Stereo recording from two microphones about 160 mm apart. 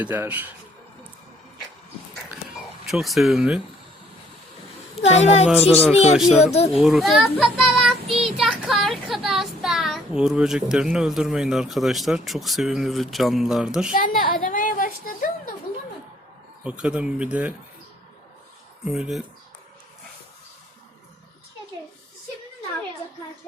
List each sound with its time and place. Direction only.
0.0 s speech: 10° right (ahead or behind)
2.3 s a sound: centre (ahead or behind)
4.9 s a woman's voice: 45° left (ahead or behind)
5.5 s speech: 5° right (ahead or behind)
5.9 s speech: 40° left (ahead or behind)
6.7 s speech: centre (ahead or behind)
7.3 s child singing: centre (ahead or behind)
8.4 s speech: centre (ahead or behind)
13.9 s a sound: 60° left (ahead or behind)
16.6 s speech: 5° right (ahead or behind)
18.9 s speech: 5° right (ahead or behind)